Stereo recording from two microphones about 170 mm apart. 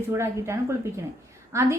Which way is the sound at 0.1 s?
15° right (ahead or behind).